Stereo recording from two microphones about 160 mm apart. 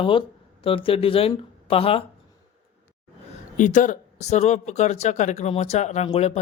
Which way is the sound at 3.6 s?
50° left (ahead or behind).